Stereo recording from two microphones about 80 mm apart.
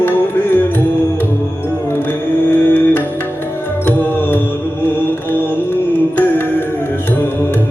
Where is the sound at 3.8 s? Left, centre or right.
Left.